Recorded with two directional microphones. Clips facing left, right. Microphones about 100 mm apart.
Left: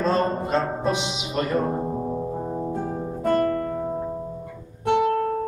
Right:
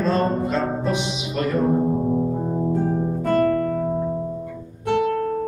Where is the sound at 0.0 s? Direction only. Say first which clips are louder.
Right 2 dB; 25° left (ahead or behind).